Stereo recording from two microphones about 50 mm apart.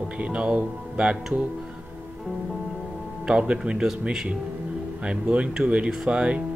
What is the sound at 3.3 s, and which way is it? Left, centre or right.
Speech, centre.